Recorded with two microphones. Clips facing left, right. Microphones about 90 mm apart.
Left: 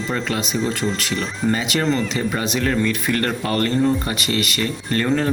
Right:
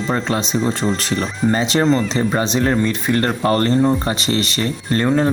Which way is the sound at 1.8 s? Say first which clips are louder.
Right 4 dB; 20° right (ahead or behind).